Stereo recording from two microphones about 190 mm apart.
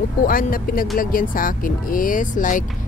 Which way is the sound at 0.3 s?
50° left (ahead or behind).